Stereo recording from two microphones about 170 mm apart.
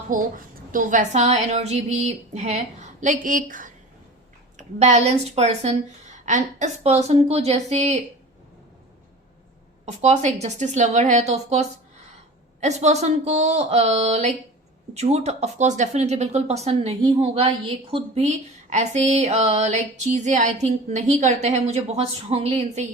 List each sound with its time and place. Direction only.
0.1 s a woman's voice: 50° right (ahead or behind)
4.5 s speech: 40° right (ahead or behind)
9.8 s a woman's voice: 40° right (ahead or behind)